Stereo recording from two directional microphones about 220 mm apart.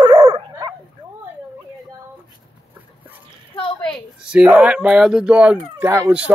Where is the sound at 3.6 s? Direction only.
25° left (ahead or behind).